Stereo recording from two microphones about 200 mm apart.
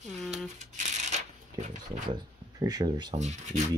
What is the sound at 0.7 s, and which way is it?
Shuffling cards, 35° right (ahead or behind).